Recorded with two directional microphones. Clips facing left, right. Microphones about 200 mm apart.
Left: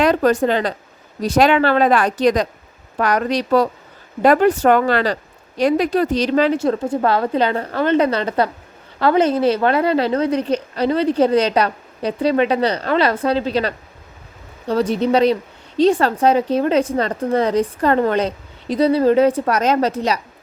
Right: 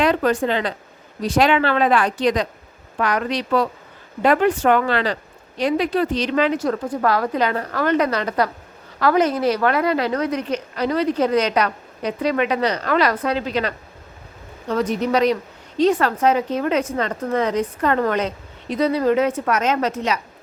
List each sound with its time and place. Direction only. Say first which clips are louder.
0.0 s a woman's voice: left 3 dB; 40° left (ahead or behind)